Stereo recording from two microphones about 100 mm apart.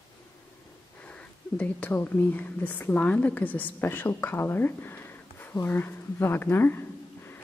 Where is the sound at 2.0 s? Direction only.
20° left (ahead or behind).